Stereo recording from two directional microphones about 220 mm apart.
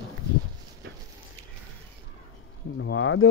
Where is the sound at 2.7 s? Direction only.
60° left (ahead or behind).